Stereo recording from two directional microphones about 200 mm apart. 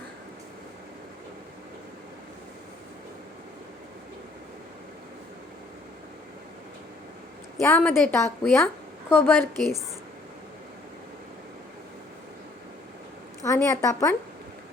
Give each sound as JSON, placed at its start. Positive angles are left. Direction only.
{"t": 7.6, "sound": "a woman's voice", "side_deg": 10}
{"t": 13.4, "sound": "a woman's voice", "side_deg": 15}